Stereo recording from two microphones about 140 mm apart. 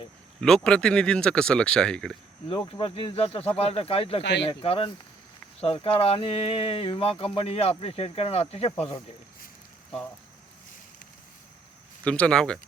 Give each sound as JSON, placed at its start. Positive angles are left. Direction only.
{"t": 0.4, "sound": "speech", "side_deg": 5}
{"t": 2.6, "sound": "speech", "side_deg": 40}
{"t": 12.0, "sound": "speech", "side_deg": 10}